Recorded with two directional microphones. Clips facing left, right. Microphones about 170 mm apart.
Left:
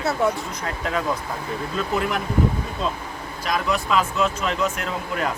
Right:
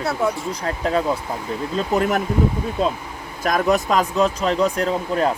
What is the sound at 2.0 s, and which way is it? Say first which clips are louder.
Speech: right 6 dB; 45° right (ahead or behind).